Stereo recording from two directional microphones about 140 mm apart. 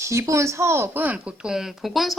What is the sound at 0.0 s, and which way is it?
Speech, 20° right (ahead or behind).